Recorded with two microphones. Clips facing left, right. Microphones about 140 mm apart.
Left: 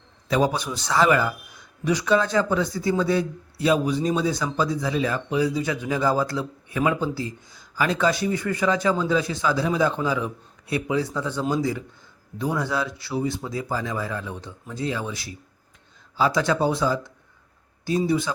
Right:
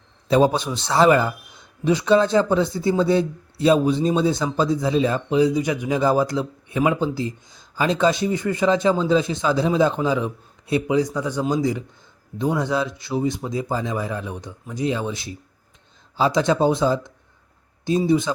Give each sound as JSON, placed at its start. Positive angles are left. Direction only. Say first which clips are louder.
{"t": 0.3, "sound": "a man's voice", "louder": "right 5 dB", "side_deg": -30}